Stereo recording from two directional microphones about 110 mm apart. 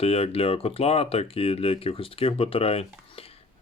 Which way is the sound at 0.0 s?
65° left (ahead or behind).